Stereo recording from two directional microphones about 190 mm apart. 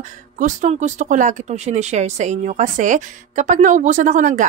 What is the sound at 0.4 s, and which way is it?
Speech, 40° right (ahead or behind).